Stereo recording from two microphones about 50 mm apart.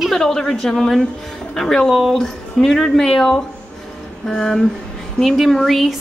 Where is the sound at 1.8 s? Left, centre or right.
Centre.